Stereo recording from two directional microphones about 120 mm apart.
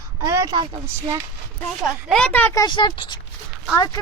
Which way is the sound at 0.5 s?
40° right (ahead or behind).